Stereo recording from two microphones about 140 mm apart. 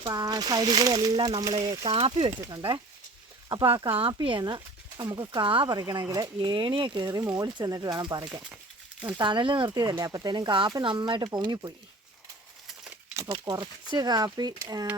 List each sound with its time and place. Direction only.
0.0 s speech: 25° right (ahead or behind)
1.9 s speech: 45° right (ahead or behind)
2.5 s speech: 30° right (ahead or behind)
3.8 s speech: 40° right (ahead or behind)
12.6 s a sound: 5° right (ahead or behind)
13.2 s speech: 30° right (ahead or behind)